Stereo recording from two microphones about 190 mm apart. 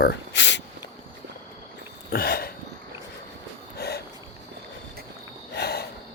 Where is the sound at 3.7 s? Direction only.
60° left (ahead or behind).